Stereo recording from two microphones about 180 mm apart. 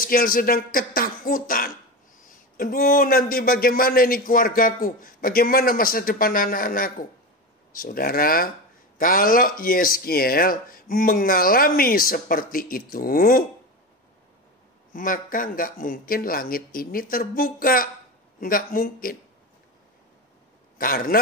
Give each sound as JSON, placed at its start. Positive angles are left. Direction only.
{"t": 0.0, "sound": "speech", "side_deg": 55}
{"t": 14.9, "sound": "speech", "side_deg": 50}
{"t": 20.7, "sound": "a man's voice", "side_deg": 50}